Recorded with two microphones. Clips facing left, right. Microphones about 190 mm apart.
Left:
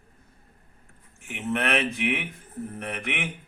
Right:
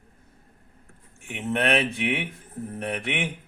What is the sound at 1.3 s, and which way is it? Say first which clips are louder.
Speech: right 2 dB; 30° right (ahead or behind).